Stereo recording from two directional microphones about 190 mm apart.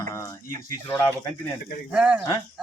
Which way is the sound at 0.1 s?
15° left (ahead or behind).